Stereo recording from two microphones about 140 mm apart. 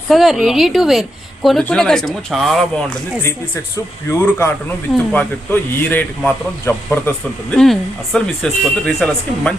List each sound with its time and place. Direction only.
0.1 s speech: centre (ahead or behind)
4.1 s a man's voice: 15° left (ahead or behind)
7.5 s speech: 5° left (ahead or behind)